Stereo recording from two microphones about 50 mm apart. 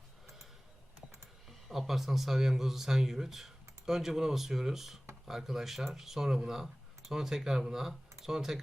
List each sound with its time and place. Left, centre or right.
1.5 s speech: centre